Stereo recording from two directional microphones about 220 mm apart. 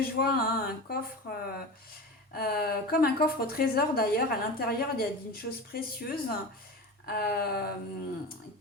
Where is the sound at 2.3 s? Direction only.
45° left (ahead or behind).